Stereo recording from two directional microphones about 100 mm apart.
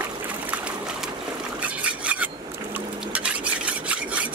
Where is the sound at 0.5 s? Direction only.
10° right (ahead or behind).